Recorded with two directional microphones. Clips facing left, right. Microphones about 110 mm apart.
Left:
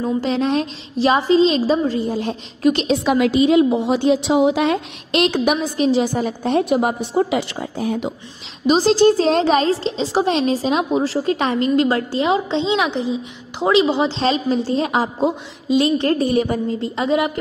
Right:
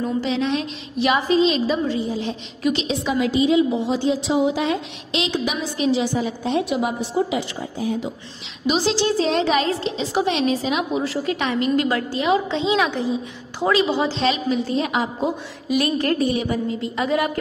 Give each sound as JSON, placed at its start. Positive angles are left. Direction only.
{"t": 0.0, "sound": "a woman's voice", "side_deg": 40}
{"t": 2.0, "sound": "a woman's voice", "side_deg": 50}
{"t": 5.8, "sound": "a woman's voice", "side_deg": 40}
{"t": 8.6, "sound": "a woman's voice", "side_deg": 40}
{"t": 14.2, "sound": "a woman's voice", "side_deg": 35}
{"t": 16.3, "sound": "a woman's voice", "side_deg": 45}
{"t": 16.7, "sound": "a woman's voice", "side_deg": 30}